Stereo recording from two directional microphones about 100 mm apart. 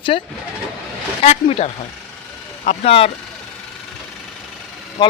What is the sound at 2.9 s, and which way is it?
Speech, 75° left (ahead or behind).